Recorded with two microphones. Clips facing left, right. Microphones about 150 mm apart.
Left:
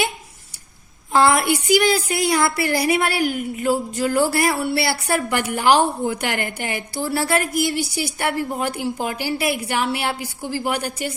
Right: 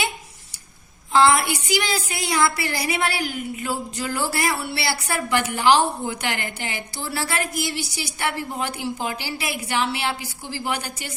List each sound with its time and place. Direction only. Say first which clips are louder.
1.1 s a woman's voice: left 1 dB; 50° left (ahead or behind)